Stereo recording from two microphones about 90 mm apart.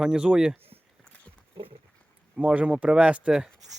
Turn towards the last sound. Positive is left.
turn(degrees=-10)  # may be behind; listen again after turning